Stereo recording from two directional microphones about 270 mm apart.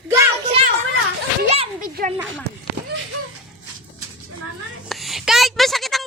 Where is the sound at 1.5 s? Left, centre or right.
Right.